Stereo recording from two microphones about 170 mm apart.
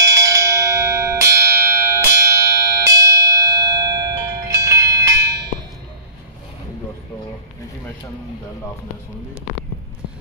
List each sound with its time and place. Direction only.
0.0 s bell: 20° right (ahead or behind)